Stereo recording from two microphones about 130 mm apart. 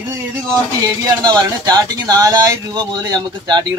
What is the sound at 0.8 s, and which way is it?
Speech, 30° right (ahead or behind).